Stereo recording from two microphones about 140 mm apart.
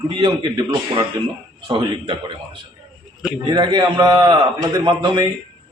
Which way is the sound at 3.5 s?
30° right (ahead or behind).